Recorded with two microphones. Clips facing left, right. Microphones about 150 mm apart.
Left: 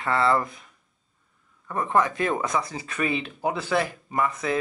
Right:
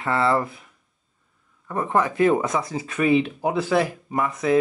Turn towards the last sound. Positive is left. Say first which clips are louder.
# right 4 dB
turn(degrees=-20)  # may be behind; listen again after turning